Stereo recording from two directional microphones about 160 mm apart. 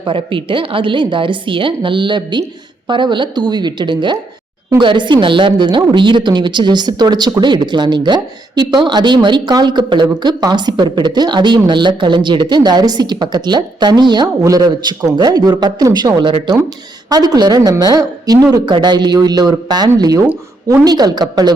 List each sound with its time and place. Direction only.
0.0 s a woman's voice: 30° right (ahead or behind)